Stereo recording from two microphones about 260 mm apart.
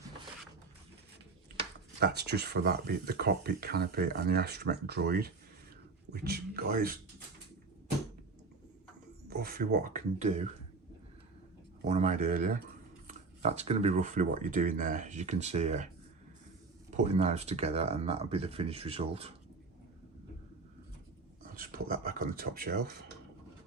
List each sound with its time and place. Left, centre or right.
2.0 s speech: right
9.3 s speech: right
11.9 s speech: right
17.2 s speech: right
21.6 s speech: right